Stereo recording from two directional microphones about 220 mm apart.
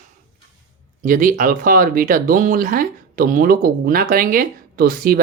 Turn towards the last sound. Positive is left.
turn(degrees=-40)  # may be behind; listen again after turning